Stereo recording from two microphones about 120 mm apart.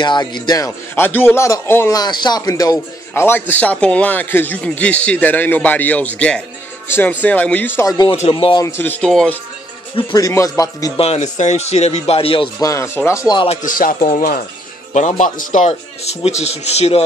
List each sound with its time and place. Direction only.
0.0 s a man's voice: 40° left (ahead or behind); by 2.0 s 25° left (ahead or behind)
2.0 s a man's voice: 35° left (ahead or behind); by 7.8 s 15° left (ahead or behind)
8.3 s a man's voice: 45° left (ahead or behind)
8.6 s a man's voice: 20° left (ahead or behind)
10.1 s a man's voice: 30° left (ahead or behind)
11.0 s speech: 70° left (ahead or behind); by 12.4 s 50° left (ahead or behind)
12.5 s a man's voice: 25° left (ahead or behind)
13.5 s speech: 90° left; by 17.0 s 65° left (ahead or behind)